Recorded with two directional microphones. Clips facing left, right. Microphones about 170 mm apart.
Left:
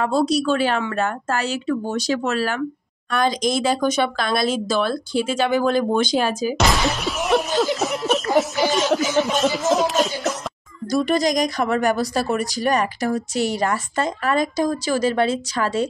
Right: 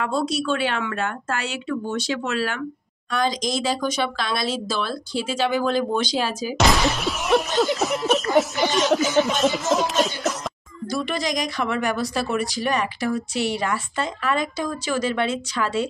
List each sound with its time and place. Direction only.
0.0 s speech: 35° left (ahead or behind)
3.1 s speech: 55° left (ahead or behind)
6.6 s a sound: centre (ahead or behind)
10.9 s speech: 40° left (ahead or behind)